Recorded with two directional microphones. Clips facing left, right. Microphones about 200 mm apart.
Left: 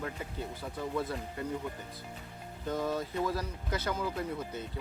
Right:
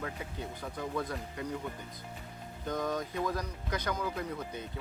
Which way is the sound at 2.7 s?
5° left (ahead or behind).